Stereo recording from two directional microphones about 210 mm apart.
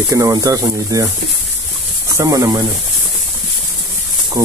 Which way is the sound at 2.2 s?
15° right (ahead or behind).